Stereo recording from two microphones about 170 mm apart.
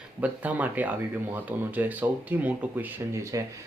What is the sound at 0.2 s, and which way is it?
Speech, 10° right (ahead or behind).